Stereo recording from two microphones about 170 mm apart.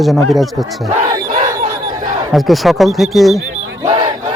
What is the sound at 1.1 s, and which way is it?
Battle cry, 25° right (ahead or behind).